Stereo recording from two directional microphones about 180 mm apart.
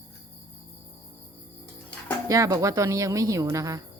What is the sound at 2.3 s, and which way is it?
Speech, 20° right (ahead or behind).